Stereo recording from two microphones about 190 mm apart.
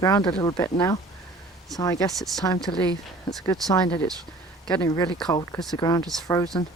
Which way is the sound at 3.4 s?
20° left (ahead or behind).